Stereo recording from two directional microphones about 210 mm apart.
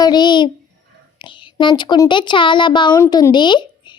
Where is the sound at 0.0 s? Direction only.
20° left (ahead or behind).